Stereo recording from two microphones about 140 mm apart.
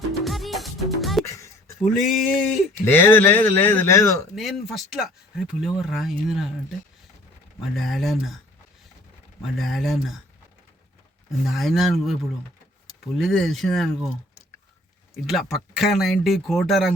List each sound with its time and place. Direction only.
0.3 s music: centre (ahead or behind)
1.8 s speech: centre (ahead or behind)
2.8 s speech: 15° left (ahead or behind)
4.4 s speech: centre (ahead or behind)
7.8 s speech: centre (ahead or behind)
9.6 s speech: centre (ahead or behind)
11.3 s speech: centre (ahead or behind)
13.1 s speech: centre (ahead or behind)
15.1 s speech: centre (ahead or behind)